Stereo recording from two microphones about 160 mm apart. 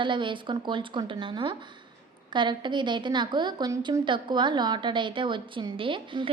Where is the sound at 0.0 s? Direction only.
30° right (ahead or behind).